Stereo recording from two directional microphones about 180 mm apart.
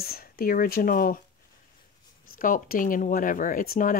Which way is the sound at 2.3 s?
50° left (ahead or behind).